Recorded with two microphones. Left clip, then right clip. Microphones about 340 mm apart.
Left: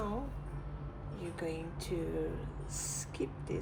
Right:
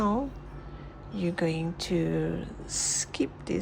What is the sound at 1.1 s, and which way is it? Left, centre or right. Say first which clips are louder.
Speech: right 10 dB; right.